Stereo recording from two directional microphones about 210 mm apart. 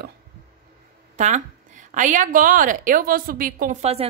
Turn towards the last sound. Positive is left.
turn(degrees=-30)  # may be behind; listen again after turning